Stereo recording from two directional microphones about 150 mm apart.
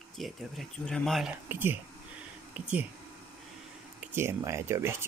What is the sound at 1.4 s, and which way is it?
Speech, 15° right (ahead or behind).